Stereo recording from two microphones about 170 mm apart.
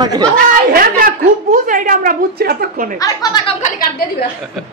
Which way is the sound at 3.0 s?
20° left (ahead or behind).